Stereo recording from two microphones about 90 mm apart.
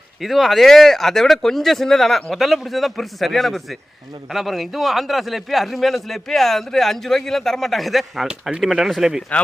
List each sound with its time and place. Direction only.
0.2 s a man's voice: centre (ahead or behind)